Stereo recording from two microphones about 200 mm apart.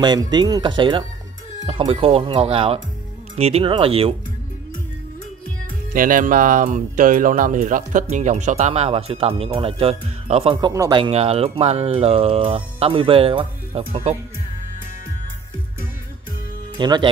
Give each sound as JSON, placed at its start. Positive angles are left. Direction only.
{"t": 0.0, "sound": "speech", "side_deg": -20}
{"t": 5.9, "sound": "speech", "side_deg": -40}
{"t": 16.7, "sound": "speech", "side_deg": -20}